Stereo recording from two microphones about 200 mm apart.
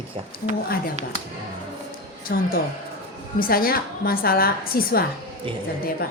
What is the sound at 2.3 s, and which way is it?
A woman's voice, 50° left (ahead or behind).